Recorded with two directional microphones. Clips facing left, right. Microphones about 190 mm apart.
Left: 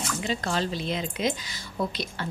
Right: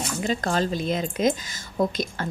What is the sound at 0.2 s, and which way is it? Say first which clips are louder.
A woman's voice: right 5 dB; 45° right (ahead or behind).